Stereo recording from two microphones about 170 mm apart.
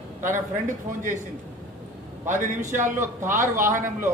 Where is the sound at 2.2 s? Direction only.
45° right (ahead or behind).